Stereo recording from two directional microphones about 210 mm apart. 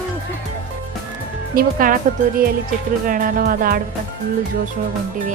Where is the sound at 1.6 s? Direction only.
40° right (ahead or behind).